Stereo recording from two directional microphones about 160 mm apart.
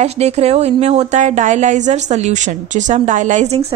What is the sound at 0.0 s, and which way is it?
Speech, 40° right (ahead or behind).